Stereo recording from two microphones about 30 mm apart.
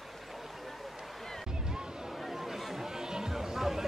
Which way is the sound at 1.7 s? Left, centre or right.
Right.